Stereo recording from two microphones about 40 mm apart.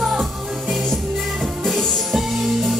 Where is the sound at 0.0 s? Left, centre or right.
Centre.